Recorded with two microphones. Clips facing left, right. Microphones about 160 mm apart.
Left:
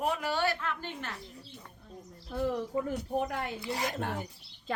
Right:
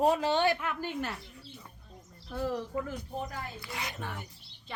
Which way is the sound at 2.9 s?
70° left (ahead or behind).